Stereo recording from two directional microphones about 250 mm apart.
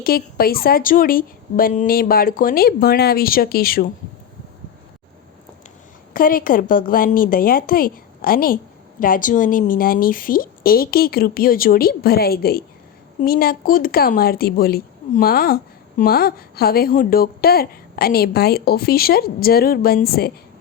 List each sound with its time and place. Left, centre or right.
0.0 s a woman's voice: left
6.1 s a woman's voice: left